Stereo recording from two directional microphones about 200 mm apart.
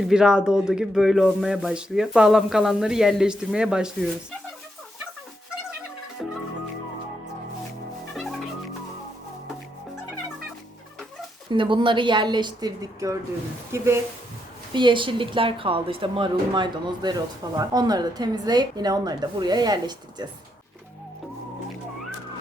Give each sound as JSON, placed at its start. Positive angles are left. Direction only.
{"t": 0.1, "sound": "speech", "side_deg": -5}
{"t": 8.1, "sound": "music", "side_deg": 0}
{"t": 11.5, "sound": "speech", "side_deg": -25}
{"t": 14.7, "sound": "speech", "side_deg": -25}